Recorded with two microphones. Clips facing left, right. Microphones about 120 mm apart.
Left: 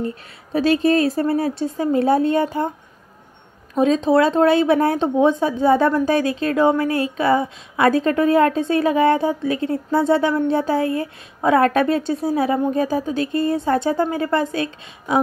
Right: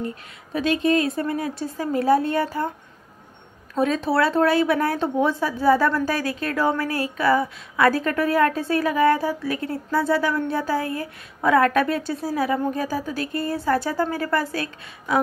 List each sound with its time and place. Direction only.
0.0 s speech: 35° left (ahead or behind)
3.7 s speech: 20° left (ahead or behind)